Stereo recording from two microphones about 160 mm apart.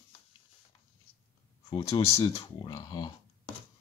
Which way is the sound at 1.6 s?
25° left (ahead or behind).